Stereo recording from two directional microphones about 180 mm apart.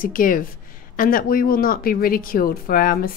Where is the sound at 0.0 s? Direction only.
50° left (ahead or behind).